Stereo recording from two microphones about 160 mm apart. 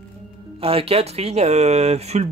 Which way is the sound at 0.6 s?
35° right (ahead or behind).